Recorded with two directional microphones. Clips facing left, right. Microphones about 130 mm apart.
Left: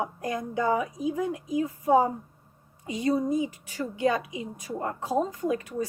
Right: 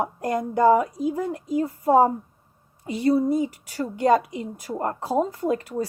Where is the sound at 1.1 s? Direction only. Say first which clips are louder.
Right 3 dB; 40° right (ahead or behind).